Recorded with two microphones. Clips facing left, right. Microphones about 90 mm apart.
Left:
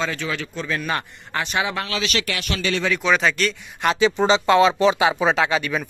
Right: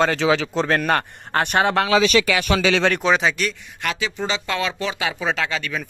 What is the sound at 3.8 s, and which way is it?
Speech, 25° left (ahead or behind).